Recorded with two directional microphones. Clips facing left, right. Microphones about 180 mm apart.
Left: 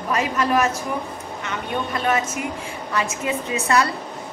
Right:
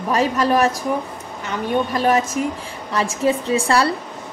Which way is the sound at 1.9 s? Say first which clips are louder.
Right 1 dB; 35° right (ahead or behind).